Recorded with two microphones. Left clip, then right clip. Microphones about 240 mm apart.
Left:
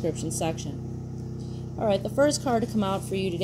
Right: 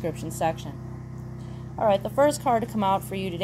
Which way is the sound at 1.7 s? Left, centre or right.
Right.